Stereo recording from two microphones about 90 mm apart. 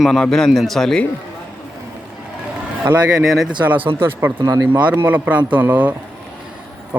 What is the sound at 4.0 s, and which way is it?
A man's voice, 20° right (ahead or behind).